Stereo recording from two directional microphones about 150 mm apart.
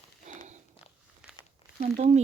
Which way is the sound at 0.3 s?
50° right (ahead or behind).